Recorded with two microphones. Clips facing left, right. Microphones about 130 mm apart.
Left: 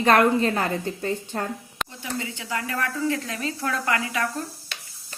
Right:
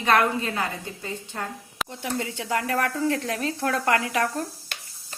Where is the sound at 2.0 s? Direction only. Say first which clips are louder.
Right 4 dB; 60° right (ahead or behind).